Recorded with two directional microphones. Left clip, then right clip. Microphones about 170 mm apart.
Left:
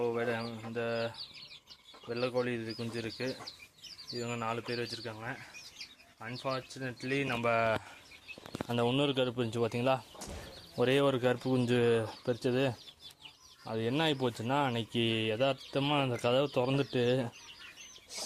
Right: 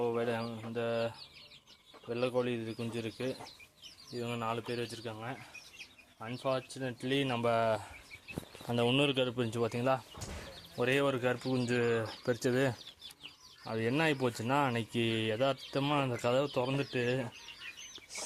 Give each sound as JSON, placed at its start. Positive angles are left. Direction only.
{"t": 0.0, "sound": "speech", "side_deg": -5}
{"t": 10.8, "sound": "speech", "side_deg": 25}
{"t": 12.0, "sound": "speech", "side_deg": -5}
{"t": 16.6, "sound": "speech", "side_deg": 30}